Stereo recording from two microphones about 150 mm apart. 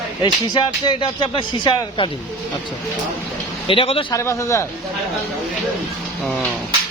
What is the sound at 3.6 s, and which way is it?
Speech, 35° left (ahead or behind).